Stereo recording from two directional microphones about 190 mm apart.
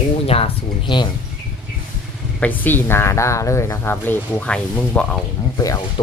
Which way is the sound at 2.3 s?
10° left (ahead or behind).